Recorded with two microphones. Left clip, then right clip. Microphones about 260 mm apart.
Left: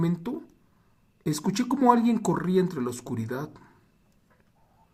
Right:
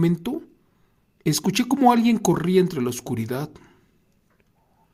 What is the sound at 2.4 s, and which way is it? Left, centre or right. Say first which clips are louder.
Speech: right 6 dB; right.